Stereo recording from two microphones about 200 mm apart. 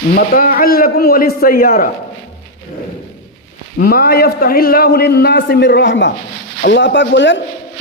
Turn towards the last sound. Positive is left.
turn(degrees=65)  # may be behind; listen again after turning